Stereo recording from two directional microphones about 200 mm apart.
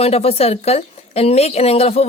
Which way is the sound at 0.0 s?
30° left (ahead or behind).